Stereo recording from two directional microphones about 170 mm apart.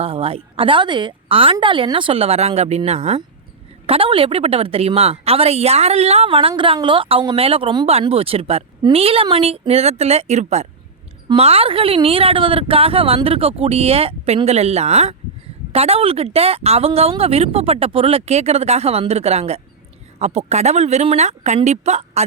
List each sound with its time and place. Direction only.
0.0 s speech: 35° right (ahead or behind)